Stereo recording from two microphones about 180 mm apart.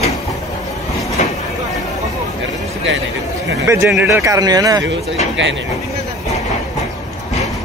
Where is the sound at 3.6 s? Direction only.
15° right (ahead or behind).